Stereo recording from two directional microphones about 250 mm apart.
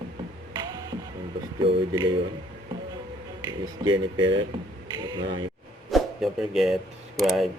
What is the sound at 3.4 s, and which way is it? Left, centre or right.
Speech, centre.